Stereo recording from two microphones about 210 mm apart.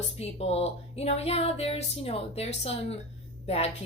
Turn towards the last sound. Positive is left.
turn(degrees=30)  # may be behind; listen again after turning